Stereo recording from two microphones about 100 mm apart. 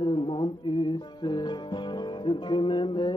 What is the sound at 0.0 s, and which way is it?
Music, 55° left (ahead or behind).